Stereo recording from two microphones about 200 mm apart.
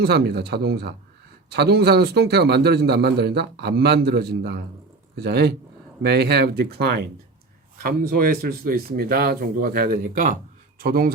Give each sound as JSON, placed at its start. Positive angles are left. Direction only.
{"t": 0.0, "sound": "a man's voice", "side_deg": -55}